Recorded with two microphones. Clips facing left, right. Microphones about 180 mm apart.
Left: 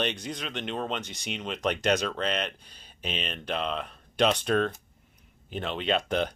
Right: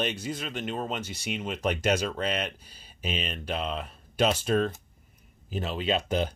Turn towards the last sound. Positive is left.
turn(degrees=-5)  # may be behind; listen again after turning